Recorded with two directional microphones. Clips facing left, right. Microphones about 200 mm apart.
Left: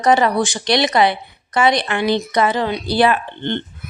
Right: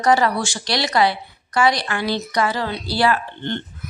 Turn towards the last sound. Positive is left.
turn(degrees=20)  # may be behind; listen again after turning